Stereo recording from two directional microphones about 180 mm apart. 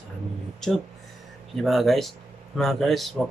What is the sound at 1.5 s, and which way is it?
Speech, centre (ahead or behind).